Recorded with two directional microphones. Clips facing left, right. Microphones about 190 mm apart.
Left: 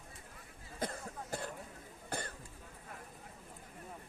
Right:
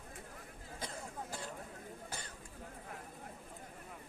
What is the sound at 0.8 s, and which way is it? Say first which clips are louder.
Cough: left 5 dB; 55° left (ahead or behind).